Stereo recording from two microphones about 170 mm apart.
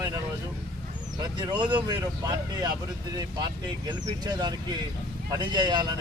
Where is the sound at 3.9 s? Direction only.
25° right (ahead or behind).